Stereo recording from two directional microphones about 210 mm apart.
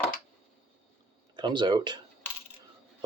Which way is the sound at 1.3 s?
20° right (ahead or behind).